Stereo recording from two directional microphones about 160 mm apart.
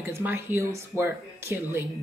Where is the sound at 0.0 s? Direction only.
15° right (ahead or behind).